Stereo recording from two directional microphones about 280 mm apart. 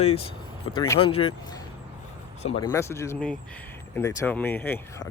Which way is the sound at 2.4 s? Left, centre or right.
Centre.